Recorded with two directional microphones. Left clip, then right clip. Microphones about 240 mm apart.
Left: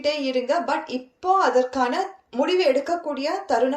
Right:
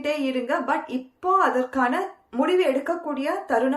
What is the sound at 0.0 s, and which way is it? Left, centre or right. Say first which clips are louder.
A woman's voice: left 2 dB; centre.